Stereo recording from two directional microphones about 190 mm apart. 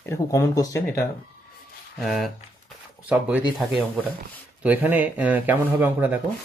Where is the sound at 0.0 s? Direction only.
15° left (ahead or behind).